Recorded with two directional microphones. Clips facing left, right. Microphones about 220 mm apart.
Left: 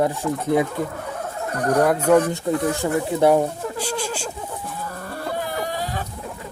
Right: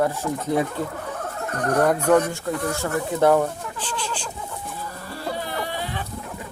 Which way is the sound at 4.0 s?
45° left (ahead or behind).